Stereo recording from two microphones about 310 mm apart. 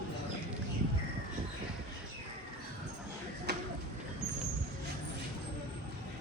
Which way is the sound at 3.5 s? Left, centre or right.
Right.